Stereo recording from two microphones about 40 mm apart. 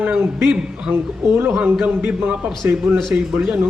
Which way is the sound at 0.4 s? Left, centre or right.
Centre.